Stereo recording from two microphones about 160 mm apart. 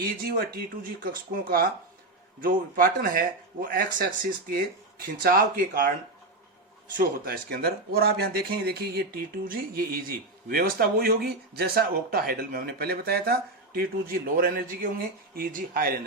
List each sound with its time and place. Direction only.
0.3 s speech: 70° right (ahead or behind)
6.9 s speech: 70° right (ahead or behind)